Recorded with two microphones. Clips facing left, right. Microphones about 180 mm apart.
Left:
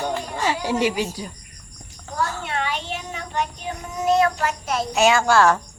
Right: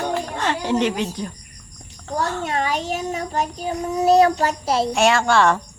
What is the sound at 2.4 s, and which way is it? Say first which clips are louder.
Child singing: right 4 dB; 40° right (ahead or behind).